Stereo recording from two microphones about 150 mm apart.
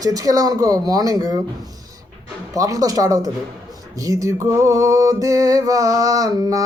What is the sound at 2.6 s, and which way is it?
Speech, 25° right (ahead or behind).